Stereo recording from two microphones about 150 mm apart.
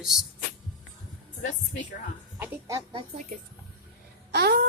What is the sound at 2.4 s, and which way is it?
Speech, 20° right (ahead or behind).